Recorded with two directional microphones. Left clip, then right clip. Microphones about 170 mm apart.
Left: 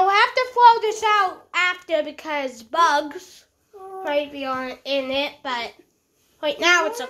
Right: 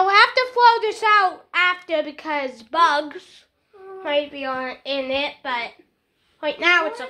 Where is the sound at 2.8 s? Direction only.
20° left (ahead or behind).